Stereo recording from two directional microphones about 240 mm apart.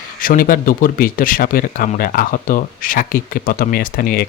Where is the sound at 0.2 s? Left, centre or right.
Left.